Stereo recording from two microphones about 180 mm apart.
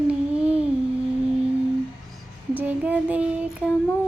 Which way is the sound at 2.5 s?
10° right (ahead or behind).